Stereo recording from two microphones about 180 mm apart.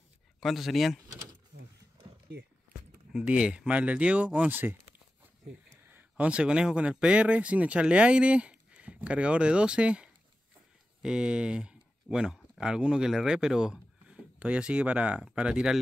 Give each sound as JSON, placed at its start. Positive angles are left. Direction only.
{"t": 0.4, "sound": "speech", "side_deg": 0}
{"t": 3.1, "sound": "speech", "side_deg": -5}
{"t": 5.9, "sound": "speech", "side_deg": -10}